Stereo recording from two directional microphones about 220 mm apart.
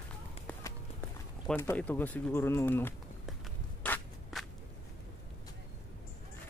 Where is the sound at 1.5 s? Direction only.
10° left (ahead or behind).